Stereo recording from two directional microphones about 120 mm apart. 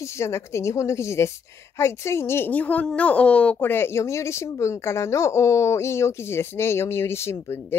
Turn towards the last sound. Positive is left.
turn(degrees=20)  # may be behind; listen again after turning